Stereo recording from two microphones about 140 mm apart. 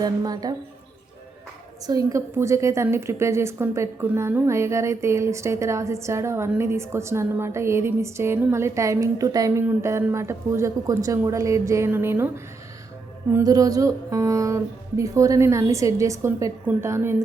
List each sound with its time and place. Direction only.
0.0 s a woman's voice: 30° right (ahead or behind)
1.9 s a woman's voice: 25° right (ahead or behind)
13.3 s a woman's voice: 25° right (ahead or behind)